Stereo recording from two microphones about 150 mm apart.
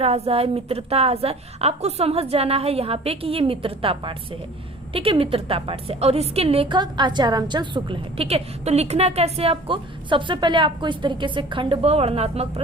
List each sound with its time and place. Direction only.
0.0 s a woman's voice: 40° right (ahead or behind)